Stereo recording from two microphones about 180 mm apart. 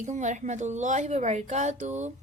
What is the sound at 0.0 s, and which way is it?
A woman's voice, 40° right (ahead or behind).